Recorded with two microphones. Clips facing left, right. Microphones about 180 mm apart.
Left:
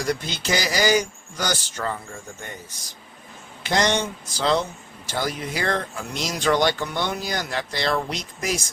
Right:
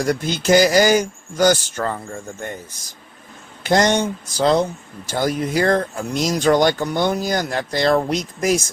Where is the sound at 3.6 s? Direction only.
45° right (ahead or behind).